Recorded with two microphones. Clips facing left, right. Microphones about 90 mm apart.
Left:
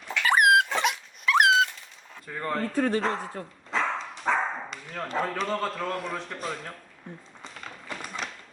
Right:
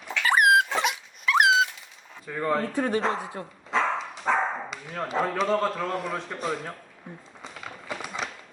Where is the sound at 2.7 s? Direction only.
15° right (ahead or behind).